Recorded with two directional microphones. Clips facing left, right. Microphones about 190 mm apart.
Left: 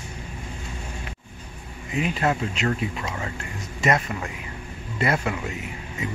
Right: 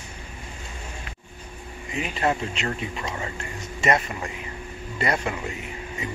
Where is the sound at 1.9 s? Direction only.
Centre (ahead or behind).